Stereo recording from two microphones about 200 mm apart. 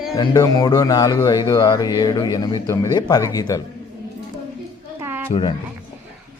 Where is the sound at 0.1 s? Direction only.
15° left (ahead or behind).